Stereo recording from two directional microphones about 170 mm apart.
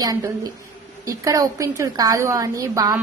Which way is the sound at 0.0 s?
20° right (ahead or behind).